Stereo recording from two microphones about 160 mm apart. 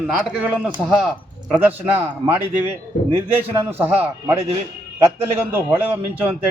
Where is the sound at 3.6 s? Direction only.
15° right (ahead or behind).